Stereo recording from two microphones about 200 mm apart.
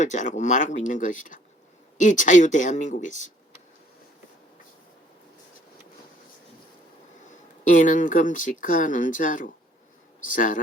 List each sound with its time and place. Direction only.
0.0 s speech: 40° left (ahead or behind)
7.7 s speech: 40° left (ahead or behind)